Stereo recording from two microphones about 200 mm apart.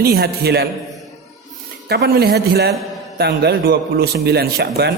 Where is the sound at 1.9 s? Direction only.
55° right (ahead or behind).